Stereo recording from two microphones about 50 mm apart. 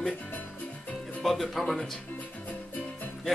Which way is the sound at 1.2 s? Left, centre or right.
Centre.